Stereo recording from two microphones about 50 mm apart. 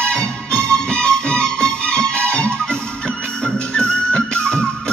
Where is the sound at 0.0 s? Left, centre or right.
Centre.